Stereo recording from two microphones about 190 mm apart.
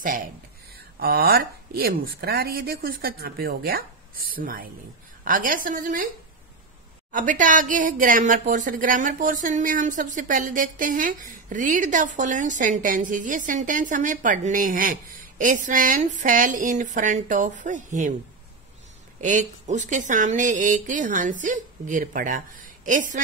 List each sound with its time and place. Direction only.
0.9 s speech: 50° right (ahead or behind)
7.1 s speech: 45° right (ahead or behind)
19.2 s a woman's voice: 40° right (ahead or behind)